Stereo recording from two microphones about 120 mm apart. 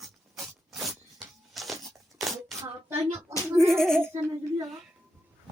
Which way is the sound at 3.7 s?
5° left (ahead or behind).